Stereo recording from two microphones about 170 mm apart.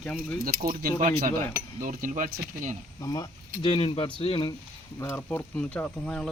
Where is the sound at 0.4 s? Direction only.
60° right (ahead or behind).